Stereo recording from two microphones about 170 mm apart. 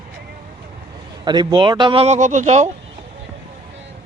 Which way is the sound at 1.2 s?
25° right (ahead or behind).